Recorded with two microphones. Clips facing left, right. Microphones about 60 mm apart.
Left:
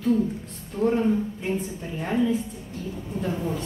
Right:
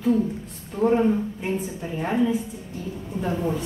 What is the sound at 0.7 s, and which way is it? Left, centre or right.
A woman's voice, centre.